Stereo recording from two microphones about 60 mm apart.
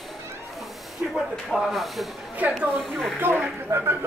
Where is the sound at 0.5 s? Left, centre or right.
Centre.